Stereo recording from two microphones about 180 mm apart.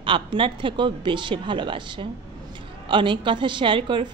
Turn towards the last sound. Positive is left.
turn(degrees=-25)  # may be behind; listen again after turning